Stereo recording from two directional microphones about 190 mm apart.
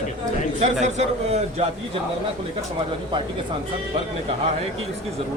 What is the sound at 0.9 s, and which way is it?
Speech, 35° right (ahead or behind).